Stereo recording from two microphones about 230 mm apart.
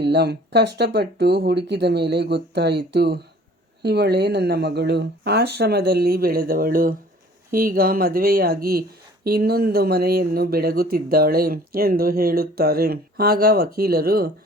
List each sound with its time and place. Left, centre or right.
0.0 s speech: right